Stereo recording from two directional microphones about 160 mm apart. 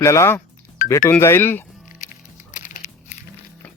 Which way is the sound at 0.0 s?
20° left (ahead or behind).